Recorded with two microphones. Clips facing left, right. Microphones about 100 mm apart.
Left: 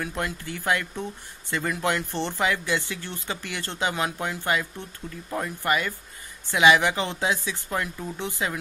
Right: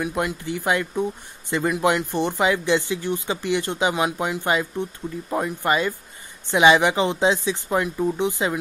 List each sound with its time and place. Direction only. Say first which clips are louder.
0.0 s speech: right 5 dB; 15° right (ahead or behind)